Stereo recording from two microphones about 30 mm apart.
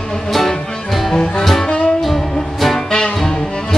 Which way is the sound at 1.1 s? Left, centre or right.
Left.